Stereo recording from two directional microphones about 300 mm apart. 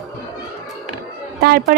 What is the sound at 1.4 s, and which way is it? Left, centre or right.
Speech, right.